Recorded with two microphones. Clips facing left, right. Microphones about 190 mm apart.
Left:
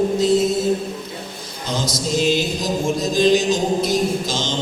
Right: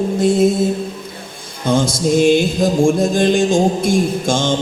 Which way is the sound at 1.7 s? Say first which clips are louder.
Right 8 dB; 55° right (ahead or behind).